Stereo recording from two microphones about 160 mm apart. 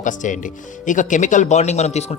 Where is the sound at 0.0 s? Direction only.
50° left (ahead or behind).